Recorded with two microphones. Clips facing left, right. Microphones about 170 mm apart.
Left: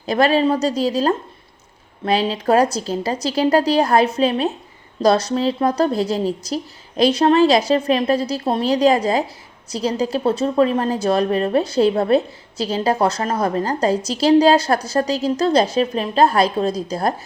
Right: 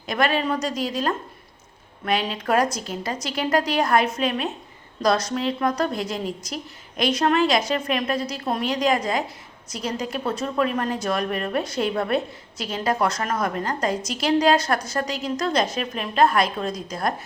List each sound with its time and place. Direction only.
0.0 s a woman's voice: 35° left (ahead or behind)